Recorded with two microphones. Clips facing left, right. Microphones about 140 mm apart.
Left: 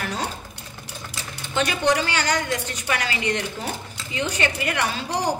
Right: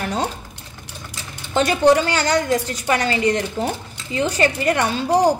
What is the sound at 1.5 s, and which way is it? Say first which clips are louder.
A woman's voice: right 7 dB; 35° right (ahead or behind).